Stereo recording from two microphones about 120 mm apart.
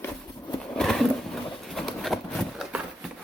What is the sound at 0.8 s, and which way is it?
Horse, 5° left (ahead or behind).